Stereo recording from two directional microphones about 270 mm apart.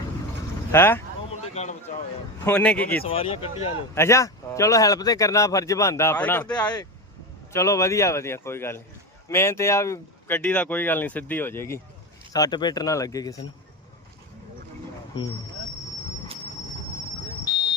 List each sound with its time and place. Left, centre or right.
0.7 s speech: centre
1.6 s speech: left
2.4 s a man's voice: centre
3.0 s speech: centre
3.9 s speech: centre
17.4 s a sound: centre